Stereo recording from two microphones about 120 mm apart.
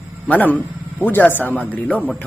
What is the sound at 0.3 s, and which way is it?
A man's voice, 15° left (ahead or behind).